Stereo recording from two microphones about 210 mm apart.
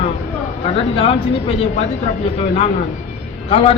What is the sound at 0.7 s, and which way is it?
Speech, 25° left (ahead or behind).